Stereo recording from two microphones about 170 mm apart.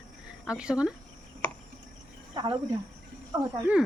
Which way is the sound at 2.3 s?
25° right (ahead or behind).